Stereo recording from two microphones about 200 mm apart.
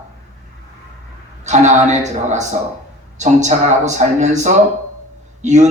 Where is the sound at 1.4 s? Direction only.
35° right (ahead or behind).